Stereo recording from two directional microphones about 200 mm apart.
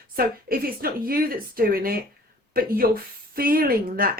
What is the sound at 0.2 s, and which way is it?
Speech, 45° right (ahead or behind).